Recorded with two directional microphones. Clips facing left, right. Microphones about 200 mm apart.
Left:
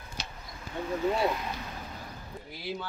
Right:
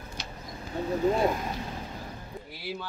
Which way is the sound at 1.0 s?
45° right (ahead or behind).